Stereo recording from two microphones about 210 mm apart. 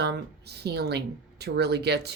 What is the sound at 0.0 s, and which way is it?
Speech, 50° right (ahead or behind).